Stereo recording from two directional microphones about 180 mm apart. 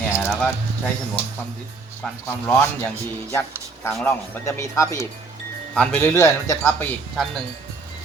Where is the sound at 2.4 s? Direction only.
10° left (ahead or behind).